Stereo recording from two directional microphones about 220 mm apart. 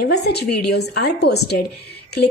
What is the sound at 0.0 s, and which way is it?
A woman's voice, 45° left (ahead or behind).